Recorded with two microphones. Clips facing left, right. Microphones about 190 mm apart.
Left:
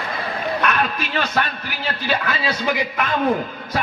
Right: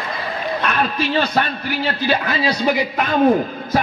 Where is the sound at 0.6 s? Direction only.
30° right (ahead or behind).